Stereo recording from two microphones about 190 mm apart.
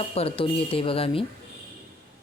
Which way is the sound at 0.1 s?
30° left (ahead or behind).